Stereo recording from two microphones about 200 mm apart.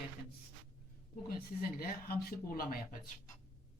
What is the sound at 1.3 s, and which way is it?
Speech, 45° left (ahead or behind).